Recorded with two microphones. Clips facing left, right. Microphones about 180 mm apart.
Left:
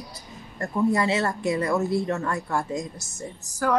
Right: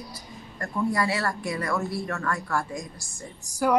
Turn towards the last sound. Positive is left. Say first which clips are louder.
# right 1 dB
turn(degrees=-15)  # may be behind; listen again after turning